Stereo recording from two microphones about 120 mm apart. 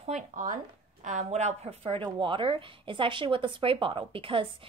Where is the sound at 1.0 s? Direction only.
85° right; by 4.5 s 50° right (ahead or behind).